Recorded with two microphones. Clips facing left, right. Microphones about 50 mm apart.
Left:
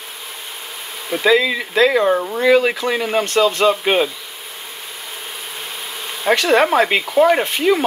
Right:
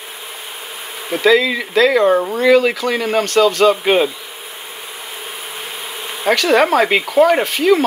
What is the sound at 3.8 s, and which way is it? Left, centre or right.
Speech, centre.